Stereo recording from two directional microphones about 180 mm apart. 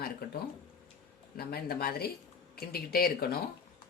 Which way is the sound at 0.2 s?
60° left (ahead or behind).